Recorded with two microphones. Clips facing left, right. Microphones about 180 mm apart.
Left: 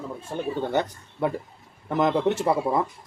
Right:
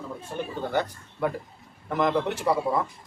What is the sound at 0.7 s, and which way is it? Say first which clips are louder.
A man's voice: left 2 dB; 20° left (ahead or behind).